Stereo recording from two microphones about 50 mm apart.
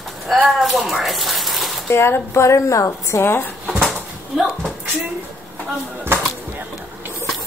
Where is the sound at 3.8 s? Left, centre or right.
Centre.